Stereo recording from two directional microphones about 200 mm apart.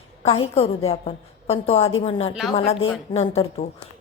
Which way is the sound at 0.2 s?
30° left (ahead or behind).